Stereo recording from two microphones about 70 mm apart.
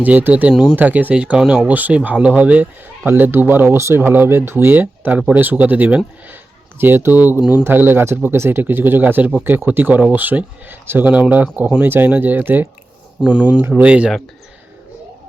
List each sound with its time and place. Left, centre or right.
0.0 s speech: right
13.8 s speech: centre